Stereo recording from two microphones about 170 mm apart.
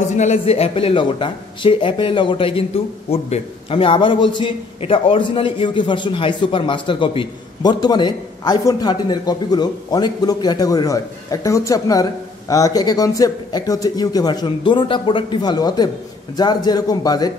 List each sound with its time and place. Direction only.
0.1 s a man's voice: 40° left (ahead or behind); by 17.3 s 25° left (ahead or behind)